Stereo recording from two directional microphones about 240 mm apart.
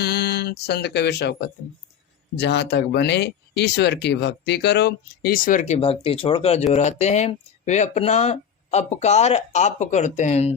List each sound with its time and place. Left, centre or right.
0.0 s speech: left